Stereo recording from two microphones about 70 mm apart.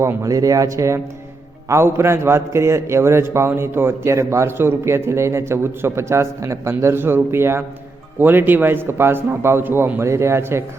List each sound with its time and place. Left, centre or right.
0.2 s a man's voice: right